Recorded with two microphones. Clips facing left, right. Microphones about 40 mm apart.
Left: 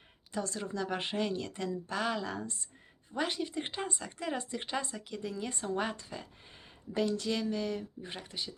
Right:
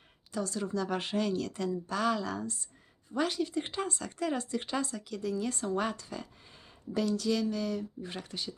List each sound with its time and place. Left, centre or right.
0.3 s speech: left
6.9 s speech: left
8.1 s speech: centre